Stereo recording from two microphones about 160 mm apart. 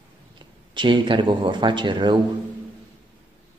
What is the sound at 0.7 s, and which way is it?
Speech, 30° right (ahead or behind).